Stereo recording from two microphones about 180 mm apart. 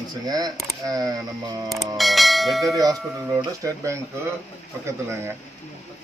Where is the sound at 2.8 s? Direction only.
20° right (ahead or behind).